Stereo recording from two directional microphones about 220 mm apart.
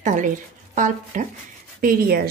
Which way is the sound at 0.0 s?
35° right (ahead or behind).